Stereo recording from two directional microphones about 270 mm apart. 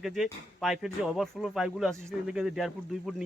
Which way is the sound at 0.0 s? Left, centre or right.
Centre.